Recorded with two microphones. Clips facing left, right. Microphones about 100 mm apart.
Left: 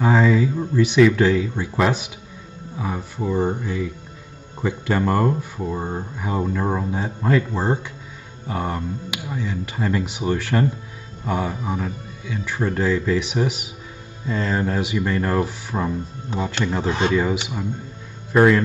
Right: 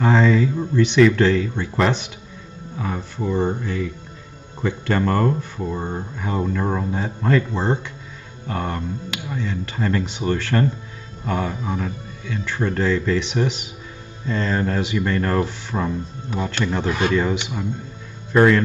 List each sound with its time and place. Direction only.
0.0 s speech: 5° left (ahead or behind)
16.3 s speech: 25° left (ahead or behind)
17.1 s speech: 5° left (ahead or behind)